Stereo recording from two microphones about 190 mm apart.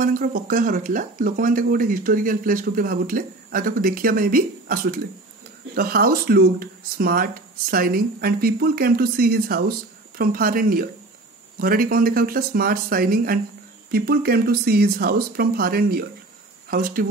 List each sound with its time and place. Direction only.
0.0 s speech: 45° right (ahead or behind)